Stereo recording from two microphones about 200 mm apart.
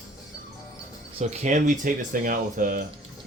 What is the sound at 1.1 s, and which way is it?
Speech, 35° right (ahead or behind).